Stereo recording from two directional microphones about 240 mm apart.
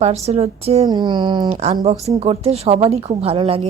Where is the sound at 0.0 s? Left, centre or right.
Right.